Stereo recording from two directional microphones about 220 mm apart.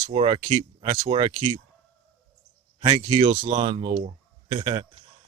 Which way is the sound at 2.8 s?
20° right (ahead or behind).